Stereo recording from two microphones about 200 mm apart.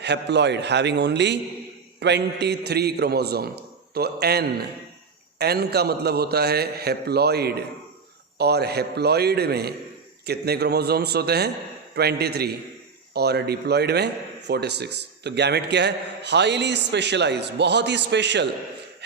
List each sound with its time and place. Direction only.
0.0 s a man's voice: 60° right (ahead or behind)